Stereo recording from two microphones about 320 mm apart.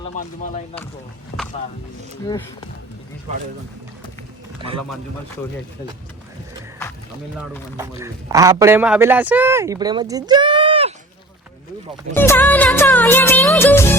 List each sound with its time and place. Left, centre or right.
0.2 s speech: left
7.8 s a man's voice: centre
12.1 s music: centre